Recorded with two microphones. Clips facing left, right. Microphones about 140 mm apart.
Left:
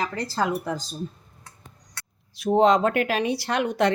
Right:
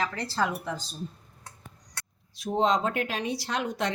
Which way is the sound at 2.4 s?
65° left (ahead or behind).